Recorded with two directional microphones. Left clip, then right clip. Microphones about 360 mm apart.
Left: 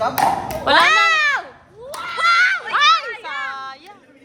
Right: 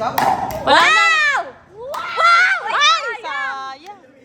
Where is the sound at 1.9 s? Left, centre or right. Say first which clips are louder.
Right 4 dB; right.